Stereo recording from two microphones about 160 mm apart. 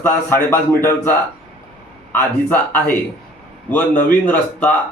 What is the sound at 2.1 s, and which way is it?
Speech, 10° left (ahead or behind).